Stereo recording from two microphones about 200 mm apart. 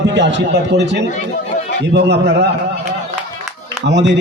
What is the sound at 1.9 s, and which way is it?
Speech, 60° right (ahead or behind).